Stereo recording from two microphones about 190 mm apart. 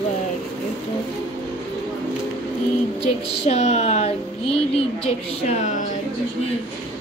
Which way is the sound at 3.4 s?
35° left (ahead or behind).